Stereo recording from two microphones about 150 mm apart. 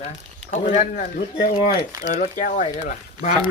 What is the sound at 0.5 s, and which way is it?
Speech, 55° left (ahead or behind).